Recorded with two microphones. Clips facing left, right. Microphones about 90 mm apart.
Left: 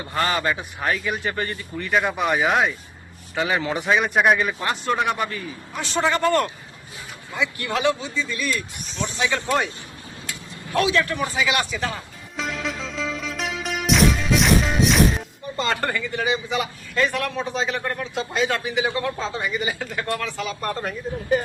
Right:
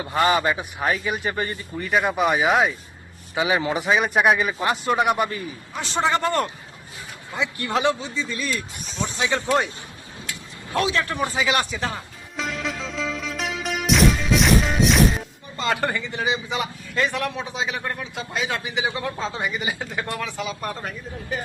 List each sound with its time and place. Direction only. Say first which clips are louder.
0.0 s a man's voice: right 3 dB; 10° right (ahead or behind); by 7.9 s 30° right (ahead or behind)
10.8 s a man's voice: left 2 dB; 30° right (ahead or behind)
12.4 s music: even; centre (ahead or behind)
15.8 s a man's voice: even; 15° right (ahead or behind)
18.6 s a man's voice: left 3 dB; 15° right (ahead or behind); by 21.4 s centre (ahead or behind)